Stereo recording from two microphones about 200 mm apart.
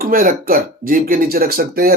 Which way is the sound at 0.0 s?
45° right (ahead or behind).